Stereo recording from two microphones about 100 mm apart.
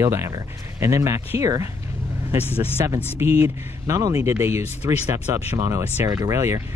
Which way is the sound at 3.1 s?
25° right (ahead or behind).